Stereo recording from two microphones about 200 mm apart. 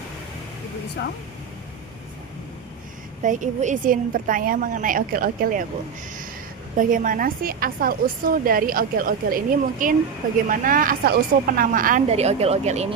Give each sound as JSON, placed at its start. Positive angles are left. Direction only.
{"t": 1.0, "sound": "speech", "side_deg": 60}
{"t": 3.2, "sound": "a woman's voice", "side_deg": -40}
{"t": 6.7, "sound": "a woman's voice", "side_deg": -40}